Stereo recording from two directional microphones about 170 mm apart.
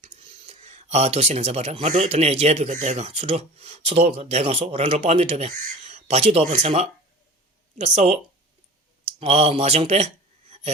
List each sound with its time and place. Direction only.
0.0 s speech: 40° right (ahead or behind)